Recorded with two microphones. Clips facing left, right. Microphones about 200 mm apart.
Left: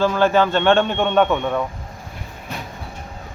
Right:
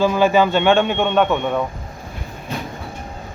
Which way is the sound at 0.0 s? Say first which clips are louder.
Right 1 dB; 10° right (ahead or behind).